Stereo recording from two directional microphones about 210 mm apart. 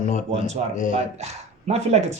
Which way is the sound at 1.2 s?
30° right (ahead or behind).